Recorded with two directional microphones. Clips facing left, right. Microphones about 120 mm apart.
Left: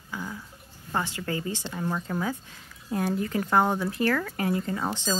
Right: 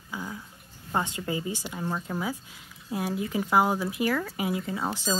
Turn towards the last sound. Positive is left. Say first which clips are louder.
# left 1 dB
turn(degrees=-5)  # may be behind; listen again after turning